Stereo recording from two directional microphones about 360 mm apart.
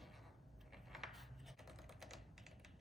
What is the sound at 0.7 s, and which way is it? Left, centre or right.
Typing, centre.